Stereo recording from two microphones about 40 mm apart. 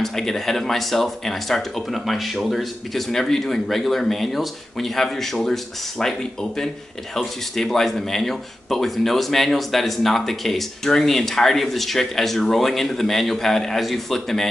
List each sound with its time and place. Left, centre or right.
0.0 s speech: centre